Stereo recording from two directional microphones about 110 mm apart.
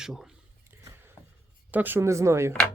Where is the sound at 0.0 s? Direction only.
5° right (ahead or behind).